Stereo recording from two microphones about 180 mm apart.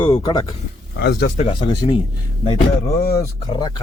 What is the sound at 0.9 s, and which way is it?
Speech, 65° left (ahead or behind).